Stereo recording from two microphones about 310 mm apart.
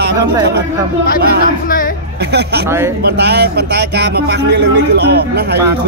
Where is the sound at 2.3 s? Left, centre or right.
Right.